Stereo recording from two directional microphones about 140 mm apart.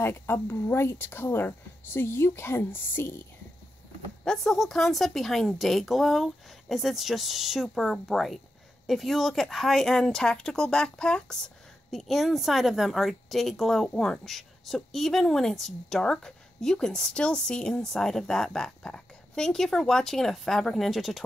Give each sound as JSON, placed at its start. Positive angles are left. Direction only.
{"t": 0.0, "sound": "speech", "side_deg": 15}
{"t": 4.2, "sound": "speech", "side_deg": 5}